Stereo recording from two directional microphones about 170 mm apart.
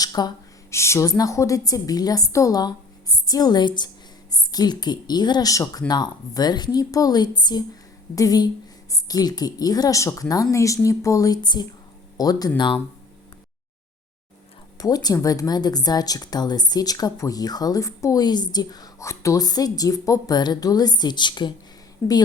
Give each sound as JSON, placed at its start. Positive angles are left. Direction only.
{"t": 0.0, "sound": "speech", "side_deg": 25}
{"t": 14.8, "sound": "speech", "side_deg": 20}